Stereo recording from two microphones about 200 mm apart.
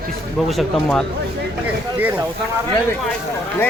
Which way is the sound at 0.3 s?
Centre (ahead or behind).